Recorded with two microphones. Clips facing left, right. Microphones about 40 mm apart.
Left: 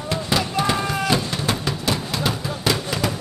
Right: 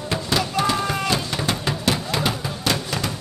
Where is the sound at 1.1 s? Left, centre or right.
Centre.